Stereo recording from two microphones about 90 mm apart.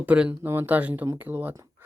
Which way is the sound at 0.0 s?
15° right (ahead or behind).